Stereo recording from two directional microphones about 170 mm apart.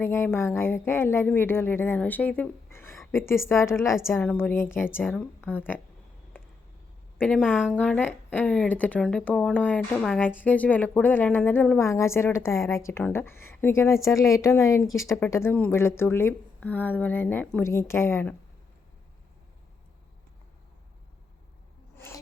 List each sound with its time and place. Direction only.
0.0 s a woman's voice: 15° left (ahead or behind)
7.2 s a woman's voice: 5° left (ahead or behind)
7.7 s a woman's voice: 10° left (ahead or behind)
21.9 s a sound: 15° left (ahead or behind)